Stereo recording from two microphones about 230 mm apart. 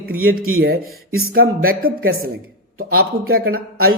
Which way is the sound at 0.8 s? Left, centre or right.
Right.